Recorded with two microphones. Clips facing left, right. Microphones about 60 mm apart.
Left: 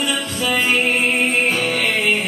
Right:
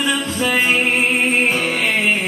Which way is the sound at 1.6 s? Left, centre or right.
Right.